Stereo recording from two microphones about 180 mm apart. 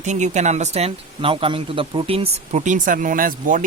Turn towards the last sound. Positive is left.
turn(degrees=-50)  # may be behind; listen again after turning